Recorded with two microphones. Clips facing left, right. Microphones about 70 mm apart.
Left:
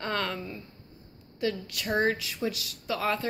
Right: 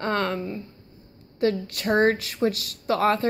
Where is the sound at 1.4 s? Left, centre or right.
Right.